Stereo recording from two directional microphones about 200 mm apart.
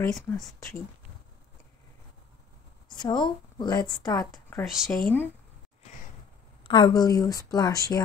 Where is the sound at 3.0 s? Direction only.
20° left (ahead or behind).